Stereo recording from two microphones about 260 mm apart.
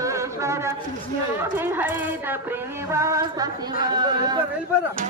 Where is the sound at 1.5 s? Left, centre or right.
Centre.